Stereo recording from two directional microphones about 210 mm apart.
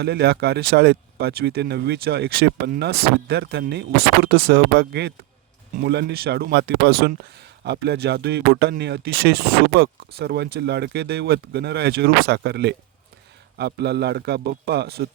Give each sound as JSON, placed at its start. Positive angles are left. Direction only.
{"t": 0.0, "sound": "speech", "side_deg": -50}